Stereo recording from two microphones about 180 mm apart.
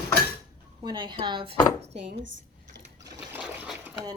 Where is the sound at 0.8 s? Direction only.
25° right (ahead or behind).